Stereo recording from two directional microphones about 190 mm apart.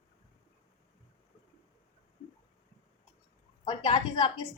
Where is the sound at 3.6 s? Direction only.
25° left (ahead or behind).